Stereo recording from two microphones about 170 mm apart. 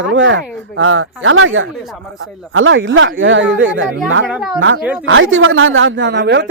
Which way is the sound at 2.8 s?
90° right.